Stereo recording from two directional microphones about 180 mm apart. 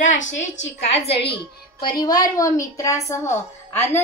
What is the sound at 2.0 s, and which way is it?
A woman's voice, 20° left (ahead or behind).